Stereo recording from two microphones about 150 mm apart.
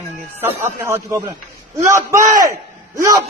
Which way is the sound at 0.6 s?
15° right (ahead or behind).